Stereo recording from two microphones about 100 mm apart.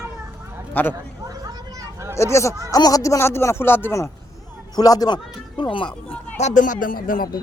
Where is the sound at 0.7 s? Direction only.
20° left (ahead or behind).